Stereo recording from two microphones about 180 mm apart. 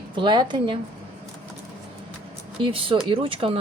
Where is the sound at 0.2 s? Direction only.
25° right (ahead or behind).